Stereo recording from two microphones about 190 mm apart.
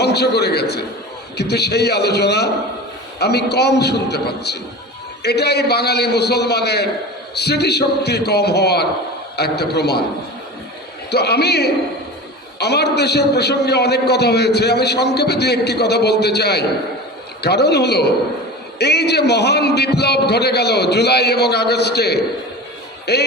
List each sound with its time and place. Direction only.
0.0 s a man's voice: 60° left (ahead or behind)
11.1 s a man's voice: 60° left (ahead or behind)